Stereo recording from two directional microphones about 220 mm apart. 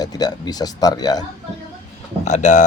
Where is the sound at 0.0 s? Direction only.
20° left (ahead or behind).